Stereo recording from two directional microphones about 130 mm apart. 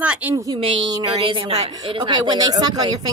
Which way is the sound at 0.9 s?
40° right (ahead or behind).